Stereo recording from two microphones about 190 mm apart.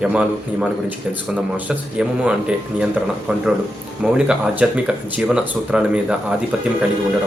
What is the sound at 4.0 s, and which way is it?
Speech, 5° right (ahead or behind).